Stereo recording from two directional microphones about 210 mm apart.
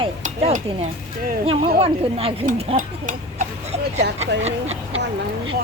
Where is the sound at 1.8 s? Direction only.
25° right (ahead or behind).